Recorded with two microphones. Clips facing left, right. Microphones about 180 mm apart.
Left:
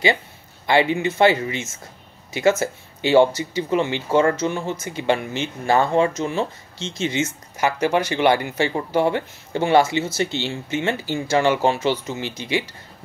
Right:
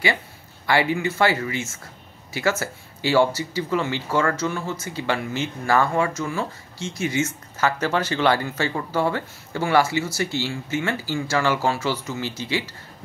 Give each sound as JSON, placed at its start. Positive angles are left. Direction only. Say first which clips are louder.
{"t": 0.7, "sound": "speech", "louder": "left 3 dB", "side_deg": 20}